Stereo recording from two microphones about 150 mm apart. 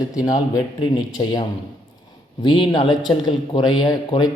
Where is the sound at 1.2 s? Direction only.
30° left (ahead or behind).